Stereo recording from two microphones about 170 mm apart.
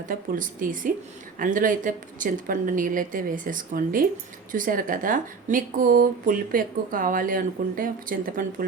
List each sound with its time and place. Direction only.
0.0 s speech: 50° right (ahead or behind)